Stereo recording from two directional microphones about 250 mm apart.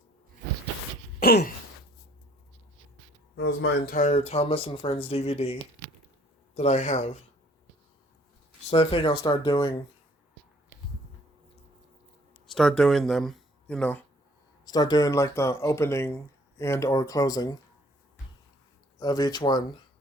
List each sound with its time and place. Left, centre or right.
1.2 s throat clearing: left
3.3 s speech: left
3.9 s speech: left
8.7 s speech: left
12.5 s speech: centre
14.6 s speech: centre
18.9 s speech: centre